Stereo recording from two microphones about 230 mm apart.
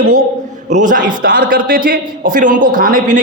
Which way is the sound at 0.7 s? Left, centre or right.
Right.